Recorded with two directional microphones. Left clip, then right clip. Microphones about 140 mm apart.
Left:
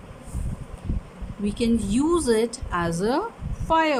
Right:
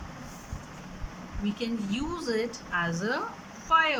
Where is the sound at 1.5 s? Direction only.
45° left (ahead or behind).